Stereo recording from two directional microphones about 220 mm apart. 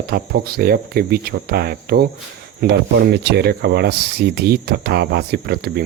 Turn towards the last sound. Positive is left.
turn(degrees=-45)  # may be behind; listen again after turning